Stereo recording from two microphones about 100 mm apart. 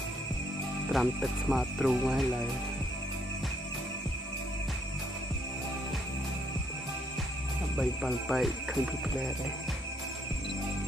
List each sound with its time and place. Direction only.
0.9 s speech: centre (ahead or behind)
7.7 s speech: centre (ahead or behind)